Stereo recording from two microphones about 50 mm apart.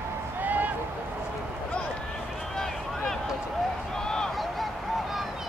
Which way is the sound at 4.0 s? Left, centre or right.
Centre.